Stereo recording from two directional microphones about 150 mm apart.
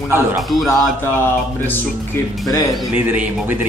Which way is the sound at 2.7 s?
Centre (ahead or behind).